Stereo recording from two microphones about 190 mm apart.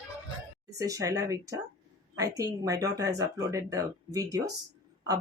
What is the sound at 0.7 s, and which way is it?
Speech, 20° right (ahead or behind).